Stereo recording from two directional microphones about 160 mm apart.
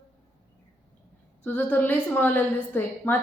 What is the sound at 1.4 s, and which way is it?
A woman's voice, 10° left (ahead or behind).